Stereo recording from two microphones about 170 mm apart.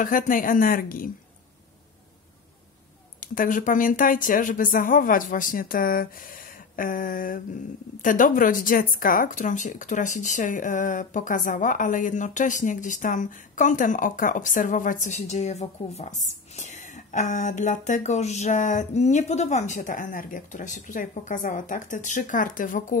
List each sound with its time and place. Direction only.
0.0 s a woman's voice: 55° left (ahead or behind)
3.2 s speech: 50° left (ahead or behind)